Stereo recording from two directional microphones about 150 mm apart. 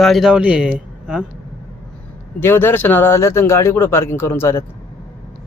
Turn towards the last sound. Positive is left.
turn(degrees=20)  # may be behind; listen again after turning